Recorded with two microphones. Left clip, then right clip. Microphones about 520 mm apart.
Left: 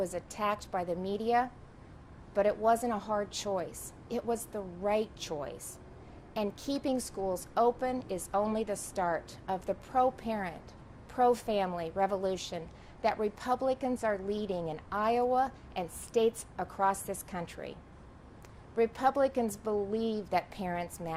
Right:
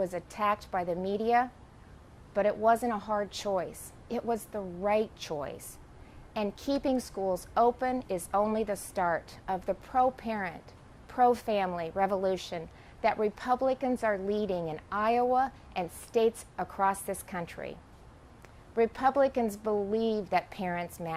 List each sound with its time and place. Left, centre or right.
0.0 s a woman's voice: right
18.8 s a woman's voice: right